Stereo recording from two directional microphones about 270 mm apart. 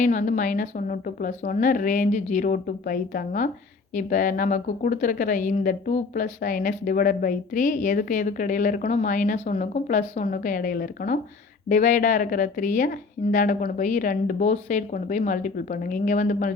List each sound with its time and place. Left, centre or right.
0.0 s a woman's voice: left